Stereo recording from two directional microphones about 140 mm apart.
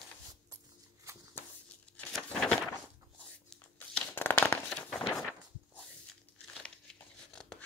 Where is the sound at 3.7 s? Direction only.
15° left (ahead or behind).